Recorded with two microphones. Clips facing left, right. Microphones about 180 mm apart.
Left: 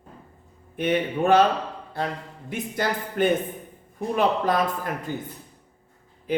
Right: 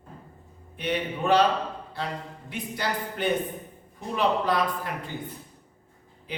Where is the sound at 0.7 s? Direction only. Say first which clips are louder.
Left 6 dB; 50° left (ahead or behind).